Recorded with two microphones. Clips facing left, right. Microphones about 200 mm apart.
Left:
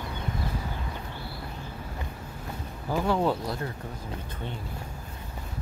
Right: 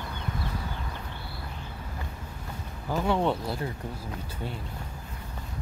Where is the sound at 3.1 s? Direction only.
Centre (ahead or behind).